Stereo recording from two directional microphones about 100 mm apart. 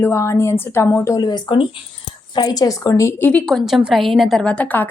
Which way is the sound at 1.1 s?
45° left (ahead or behind).